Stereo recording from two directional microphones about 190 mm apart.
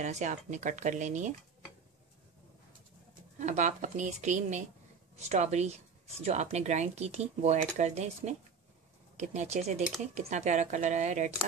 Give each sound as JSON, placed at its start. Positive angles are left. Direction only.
{"t": 0.0, "sound": "speech", "side_deg": -40}
{"t": 3.3, "sound": "speech", "side_deg": -40}